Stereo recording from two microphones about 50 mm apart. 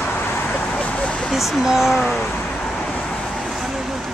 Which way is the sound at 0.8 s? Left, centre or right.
Left.